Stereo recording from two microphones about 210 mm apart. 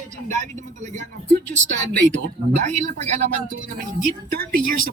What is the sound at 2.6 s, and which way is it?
Speech, 35° right (ahead or behind).